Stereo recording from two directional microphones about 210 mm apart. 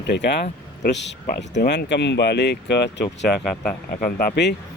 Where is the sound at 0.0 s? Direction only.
55° left (ahead or behind).